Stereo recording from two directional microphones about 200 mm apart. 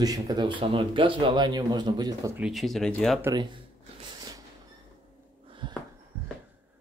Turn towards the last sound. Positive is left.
turn(degrees=-20)  # may be behind; listen again after turning